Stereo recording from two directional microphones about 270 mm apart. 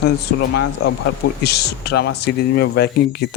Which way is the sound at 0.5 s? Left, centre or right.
Left.